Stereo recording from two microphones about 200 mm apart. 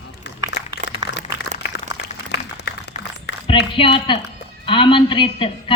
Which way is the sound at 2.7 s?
60° left (ahead or behind).